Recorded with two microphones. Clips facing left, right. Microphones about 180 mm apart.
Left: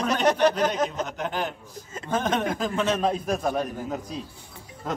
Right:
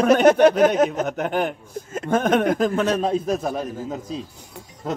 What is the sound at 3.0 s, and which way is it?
A man's voice, 25° right (ahead or behind).